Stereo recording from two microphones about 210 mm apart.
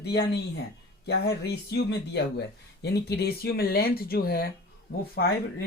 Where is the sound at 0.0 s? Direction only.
50° left (ahead or behind).